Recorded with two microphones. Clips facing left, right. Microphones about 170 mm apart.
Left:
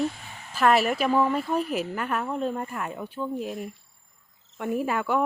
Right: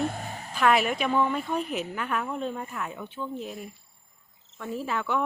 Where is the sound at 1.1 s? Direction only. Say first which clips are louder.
Left 2 dB; 35° left (ahead or behind).